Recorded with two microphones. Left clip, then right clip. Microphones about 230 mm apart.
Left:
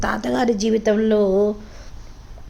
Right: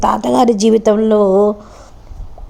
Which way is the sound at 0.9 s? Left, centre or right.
Centre.